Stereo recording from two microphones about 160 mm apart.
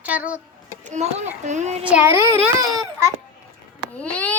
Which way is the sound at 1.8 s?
10° right (ahead or behind).